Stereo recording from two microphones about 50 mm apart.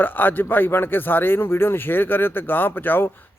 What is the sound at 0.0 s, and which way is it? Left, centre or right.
A man's voice, left.